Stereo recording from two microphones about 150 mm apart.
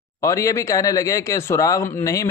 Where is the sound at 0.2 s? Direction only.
20° left (ahead or behind).